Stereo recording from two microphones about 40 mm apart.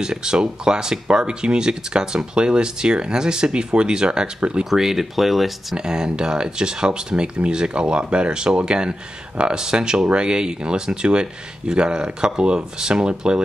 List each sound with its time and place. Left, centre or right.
0.0 s speech: centre
4.6 s speech: centre
5.8 s speech: right